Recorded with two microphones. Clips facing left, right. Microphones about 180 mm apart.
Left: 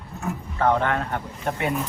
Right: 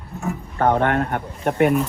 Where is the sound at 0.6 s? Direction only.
60° right (ahead or behind).